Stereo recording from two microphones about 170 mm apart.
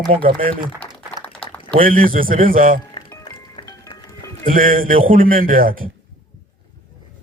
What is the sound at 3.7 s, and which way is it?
Music, 20° left (ahead or behind).